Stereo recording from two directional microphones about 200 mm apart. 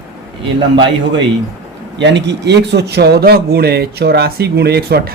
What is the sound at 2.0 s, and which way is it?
Speech, 60° right (ahead or behind).